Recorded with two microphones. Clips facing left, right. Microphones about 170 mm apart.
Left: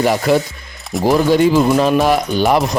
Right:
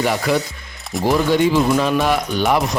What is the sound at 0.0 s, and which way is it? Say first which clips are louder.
Speech: left 4 dB; 35° left (ahead or behind).